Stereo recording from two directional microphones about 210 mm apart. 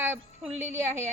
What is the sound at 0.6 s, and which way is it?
Speech, 35° right (ahead or behind).